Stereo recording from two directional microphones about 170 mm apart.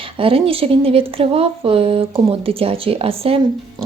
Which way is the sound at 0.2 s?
35° right (ahead or behind).